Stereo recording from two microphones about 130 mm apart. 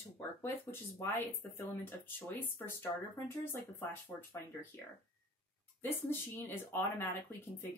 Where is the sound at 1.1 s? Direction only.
15° left (ahead or behind).